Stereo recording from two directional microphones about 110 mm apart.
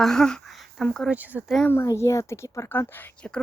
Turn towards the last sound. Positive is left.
turn(degrees=10)  # may be behind; listen again after turning